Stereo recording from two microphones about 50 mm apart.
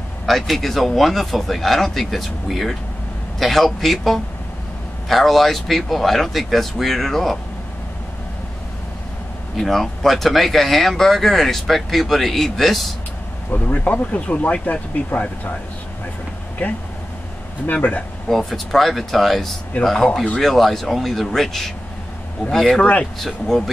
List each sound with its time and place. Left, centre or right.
0.3 s speech: centre
9.6 s speech: centre
13.5 s speech: left
13.8 s speech: left
17.6 s speech: left
18.3 s speech: centre
22.8 s speech: left
23.1 s speech: centre